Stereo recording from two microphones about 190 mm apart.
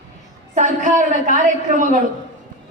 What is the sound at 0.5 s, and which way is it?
A woman's voice, 40° right (ahead or behind).